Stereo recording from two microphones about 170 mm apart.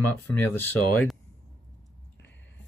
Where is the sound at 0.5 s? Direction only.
10° left (ahead or behind).